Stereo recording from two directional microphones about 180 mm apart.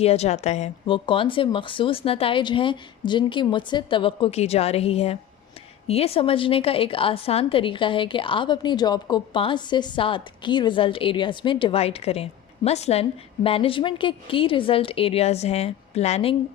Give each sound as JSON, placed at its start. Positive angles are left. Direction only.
{"t": 0.0, "sound": "a woman's voice", "side_deg": 35}